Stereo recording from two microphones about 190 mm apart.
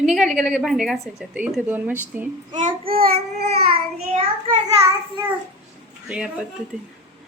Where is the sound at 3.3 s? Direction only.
55° right (ahead or behind).